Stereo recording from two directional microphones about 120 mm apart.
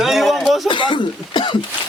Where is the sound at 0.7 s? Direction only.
40° left (ahead or behind).